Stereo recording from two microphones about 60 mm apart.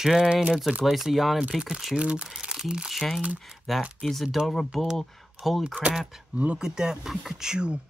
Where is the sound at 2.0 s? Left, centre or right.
Centre.